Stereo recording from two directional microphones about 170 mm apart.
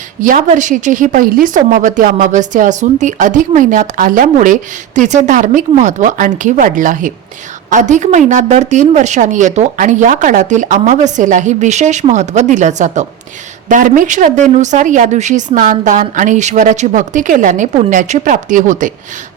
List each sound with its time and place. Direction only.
0.2 s a woman's voice: 50° right (ahead or behind)